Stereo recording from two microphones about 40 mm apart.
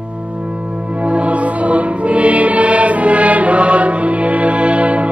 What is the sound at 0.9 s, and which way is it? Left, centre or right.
Music, right.